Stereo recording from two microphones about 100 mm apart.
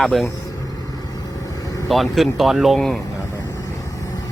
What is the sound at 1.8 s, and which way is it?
Speech, centre (ahead or behind).